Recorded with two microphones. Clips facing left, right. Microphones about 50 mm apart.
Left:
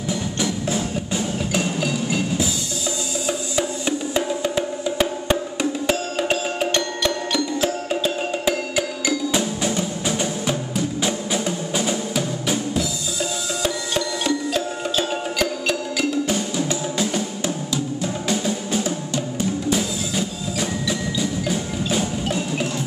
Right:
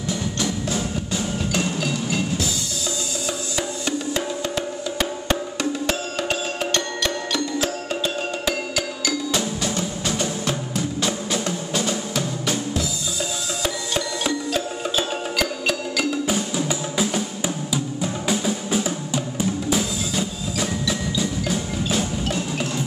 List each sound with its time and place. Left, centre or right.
0.4 s music: centre
3.3 s music: centre
20.2 s wood block: centre